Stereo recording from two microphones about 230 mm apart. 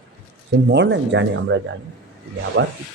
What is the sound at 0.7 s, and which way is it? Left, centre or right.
Speech, right.